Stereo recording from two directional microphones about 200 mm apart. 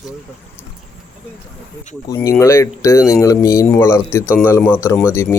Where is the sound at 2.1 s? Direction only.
15° left (ahead or behind).